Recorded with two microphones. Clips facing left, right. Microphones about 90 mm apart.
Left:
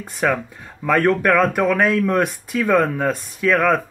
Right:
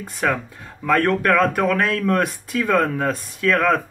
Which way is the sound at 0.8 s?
10° left (ahead or behind).